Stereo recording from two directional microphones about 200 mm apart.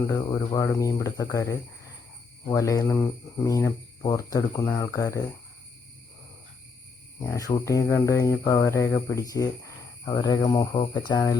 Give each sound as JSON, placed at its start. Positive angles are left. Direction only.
{"t": 0.1, "sound": "speech", "side_deg": 15}
{"t": 7.2, "sound": "speech", "side_deg": 15}